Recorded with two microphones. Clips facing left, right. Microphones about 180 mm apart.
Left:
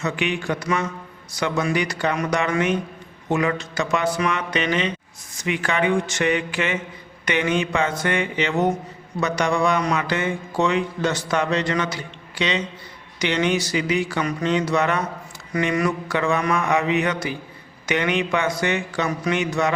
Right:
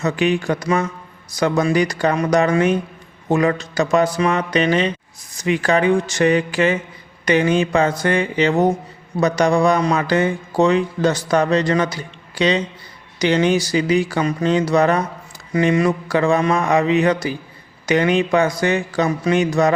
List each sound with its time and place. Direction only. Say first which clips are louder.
0.0 s a man's voice: right 6 dB; 40° right (ahead or behind)